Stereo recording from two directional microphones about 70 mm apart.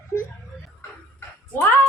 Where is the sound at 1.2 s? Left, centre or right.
Left.